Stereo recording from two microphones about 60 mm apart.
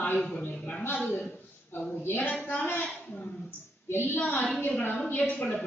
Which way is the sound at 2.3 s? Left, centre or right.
Left.